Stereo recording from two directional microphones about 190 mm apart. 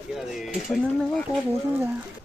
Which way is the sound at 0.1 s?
Centre (ahead or behind).